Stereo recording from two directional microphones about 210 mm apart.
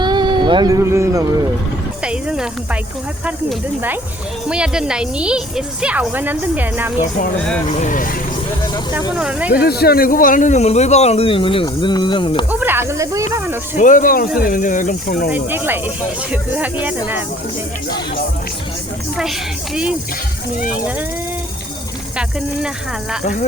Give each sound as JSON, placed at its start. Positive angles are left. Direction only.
{"t": 0.0, "sound": "a sound", "side_deg": -20}
{"t": 3.2, "sound": "a woman's voice", "side_deg": -5}
{"t": 7.7, "sound": "speech", "side_deg": 35}
{"t": 9.1, "sound": "a woman's voice", "side_deg": -5}
{"t": 9.6, "sound": "speech", "side_deg": 50}
{"t": 12.5, "sound": "speech", "side_deg": -10}
{"t": 13.7, "sound": "speech", "side_deg": 40}
{"t": 15.3, "sound": "speech", "side_deg": -10}
{"t": 19.1, "sound": "a woman's voice", "side_deg": -5}
{"t": 22.2, "sound": "a woman's voice", "side_deg": -5}
{"t": 23.2, "sound": "speech", "side_deg": 40}